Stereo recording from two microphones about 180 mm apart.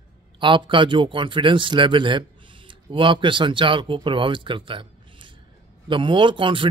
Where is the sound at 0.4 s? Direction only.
25° right (ahead or behind).